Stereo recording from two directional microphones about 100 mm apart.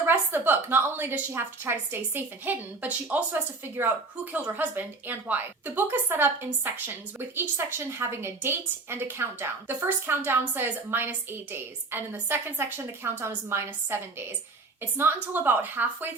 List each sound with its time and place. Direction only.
0.0 s a woman's voice: 20° right (ahead or behind)